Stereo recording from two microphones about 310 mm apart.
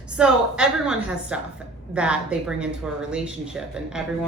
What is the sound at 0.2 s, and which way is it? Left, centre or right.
Speech, centre.